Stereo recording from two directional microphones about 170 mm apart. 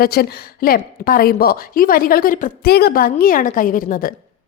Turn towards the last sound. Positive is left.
turn(degrees=55)  # may be behind; listen again after turning